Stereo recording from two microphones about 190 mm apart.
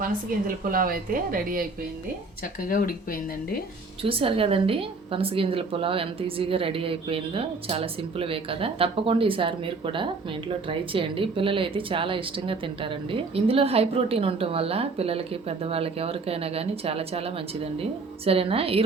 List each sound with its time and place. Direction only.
0.0 s a woman's voice: 50° right (ahead or behind)
2.4 s speech: 45° left (ahead or behind)
4.0 s a woman's voice: 30° right (ahead or behind)